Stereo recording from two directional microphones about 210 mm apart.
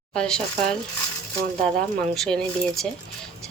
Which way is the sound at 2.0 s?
5° left (ahead or behind).